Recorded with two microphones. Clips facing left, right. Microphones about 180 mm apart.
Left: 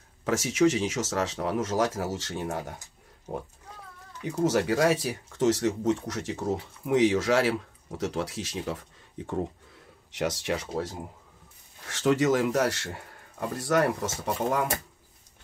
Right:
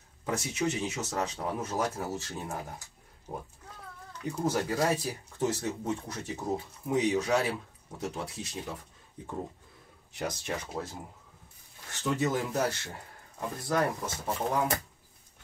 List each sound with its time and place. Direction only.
0.2 s speech: 90° left
4.2 s speech: 85° left